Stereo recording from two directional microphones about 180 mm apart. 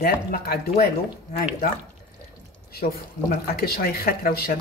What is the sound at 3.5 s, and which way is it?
Speech, 60° left (ahead or behind).